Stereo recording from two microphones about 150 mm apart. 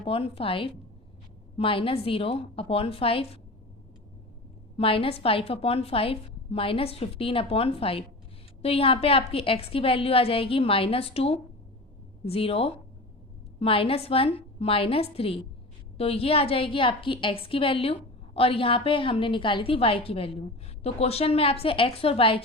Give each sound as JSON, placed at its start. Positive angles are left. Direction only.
{"t": 0.0, "sound": "a woman's voice", "side_deg": 40}
{"t": 4.8, "sound": "a woman's voice", "side_deg": 40}